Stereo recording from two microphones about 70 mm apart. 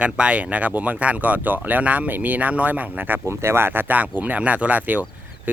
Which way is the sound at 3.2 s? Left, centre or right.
Right.